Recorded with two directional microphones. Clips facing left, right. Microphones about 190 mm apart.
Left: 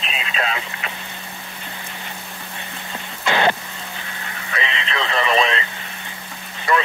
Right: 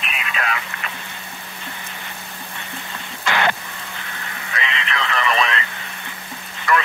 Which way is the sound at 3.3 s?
20° left (ahead or behind).